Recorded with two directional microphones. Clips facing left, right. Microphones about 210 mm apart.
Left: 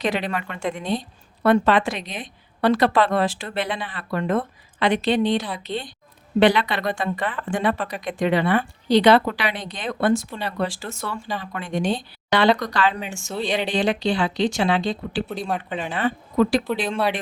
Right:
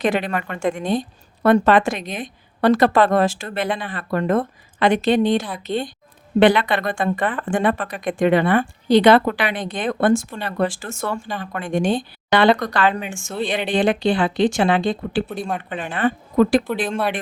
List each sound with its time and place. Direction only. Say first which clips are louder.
0.0 s speech: right 4 dB; 50° right (ahead or behind)